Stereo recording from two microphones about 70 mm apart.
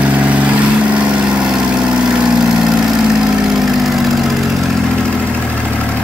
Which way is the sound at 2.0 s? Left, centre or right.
Centre.